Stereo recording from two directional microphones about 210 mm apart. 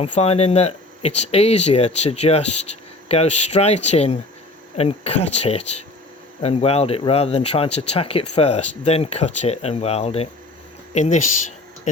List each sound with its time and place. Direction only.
0.0 s speech: 30° left (ahead or behind)